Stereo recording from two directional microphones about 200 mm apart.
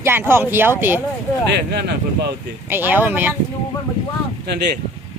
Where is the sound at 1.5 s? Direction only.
55° right (ahead or behind).